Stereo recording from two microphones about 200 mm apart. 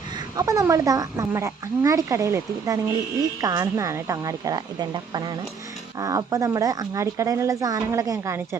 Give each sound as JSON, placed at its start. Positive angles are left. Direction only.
{"t": 0.3, "sound": "speech", "side_deg": -15}